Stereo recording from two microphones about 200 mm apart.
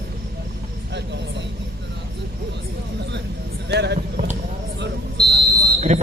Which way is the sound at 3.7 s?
55° right (ahead or behind).